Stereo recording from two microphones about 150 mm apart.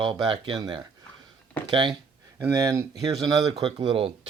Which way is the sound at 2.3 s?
20° right (ahead or behind).